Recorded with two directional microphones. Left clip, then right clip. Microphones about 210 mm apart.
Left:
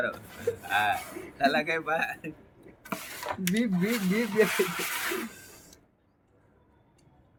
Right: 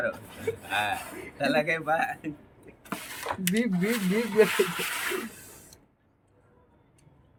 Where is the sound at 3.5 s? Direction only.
15° right (ahead or behind).